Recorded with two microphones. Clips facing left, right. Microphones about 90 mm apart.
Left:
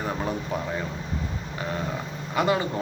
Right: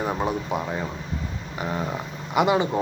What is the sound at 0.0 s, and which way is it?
Speech, 15° right (ahead or behind).